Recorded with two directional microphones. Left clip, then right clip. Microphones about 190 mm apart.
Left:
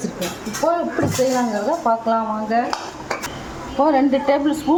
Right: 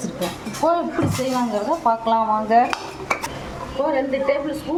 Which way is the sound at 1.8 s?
5° right (ahead or behind).